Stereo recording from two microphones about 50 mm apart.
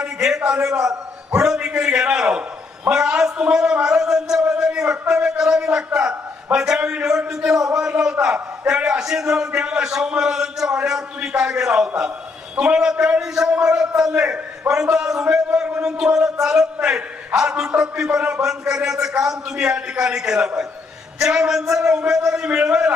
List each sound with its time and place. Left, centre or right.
0.0 s a man's voice: centre